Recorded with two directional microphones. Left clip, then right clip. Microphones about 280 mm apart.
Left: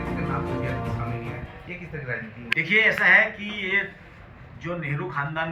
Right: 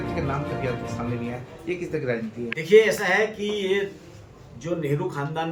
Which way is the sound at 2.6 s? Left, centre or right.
Centre.